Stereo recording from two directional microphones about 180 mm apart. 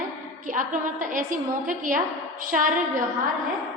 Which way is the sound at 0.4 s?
50° right (ahead or behind).